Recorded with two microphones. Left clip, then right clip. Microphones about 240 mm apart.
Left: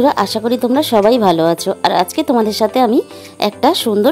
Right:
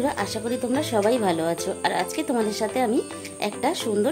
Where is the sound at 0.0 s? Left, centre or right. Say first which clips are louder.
Left 12 dB; left.